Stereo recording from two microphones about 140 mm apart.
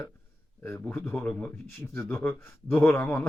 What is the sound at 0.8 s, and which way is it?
Speech, 10° left (ahead or behind).